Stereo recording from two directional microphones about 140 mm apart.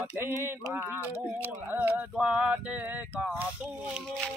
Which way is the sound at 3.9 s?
Centre (ahead or behind).